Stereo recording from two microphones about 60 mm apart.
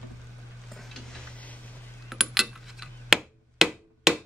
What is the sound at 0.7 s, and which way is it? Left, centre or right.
Stir, centre.